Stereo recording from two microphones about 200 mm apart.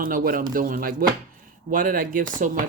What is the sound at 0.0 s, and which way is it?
Speech, 45° right (ahead or behind).